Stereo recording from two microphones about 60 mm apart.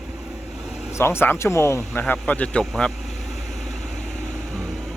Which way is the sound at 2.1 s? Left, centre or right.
Left.